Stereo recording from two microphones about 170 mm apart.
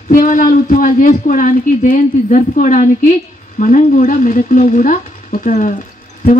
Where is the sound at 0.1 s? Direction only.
55° left (ahead or behind).